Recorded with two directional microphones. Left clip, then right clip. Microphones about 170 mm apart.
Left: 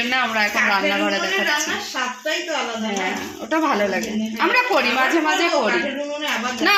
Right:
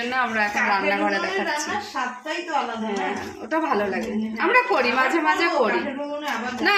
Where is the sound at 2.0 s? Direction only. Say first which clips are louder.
Left 3 dB; centre (ahead or behind).